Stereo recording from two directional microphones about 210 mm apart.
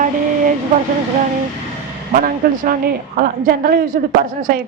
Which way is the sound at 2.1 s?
40° right (ahead or behind).